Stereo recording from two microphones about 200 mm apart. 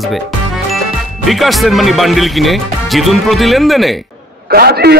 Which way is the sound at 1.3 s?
Centre (ahead or behind).